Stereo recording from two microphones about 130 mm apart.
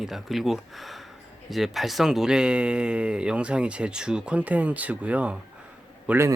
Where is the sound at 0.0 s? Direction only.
Centre (ahead or behind).